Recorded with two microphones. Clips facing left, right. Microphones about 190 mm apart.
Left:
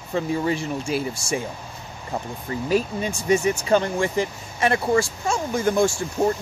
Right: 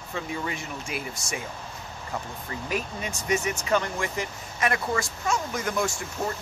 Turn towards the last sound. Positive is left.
turn(degrees=30)  # may be behind; listen again after turning